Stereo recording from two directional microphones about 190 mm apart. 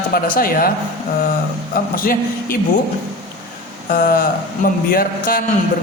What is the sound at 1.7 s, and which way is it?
Speech, 50° left (ahead or behind).